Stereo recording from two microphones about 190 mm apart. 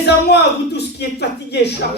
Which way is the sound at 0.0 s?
60° left (ahead or behind).